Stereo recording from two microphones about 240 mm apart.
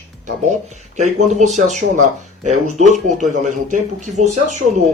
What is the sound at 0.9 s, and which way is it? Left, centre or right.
Speech, right.